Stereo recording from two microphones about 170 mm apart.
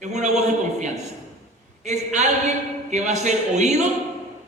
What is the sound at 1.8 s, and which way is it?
A man's voice, 40° right (ahead or behind).